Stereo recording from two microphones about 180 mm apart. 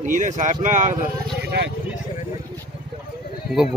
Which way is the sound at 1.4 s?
65° right (ahead or behind).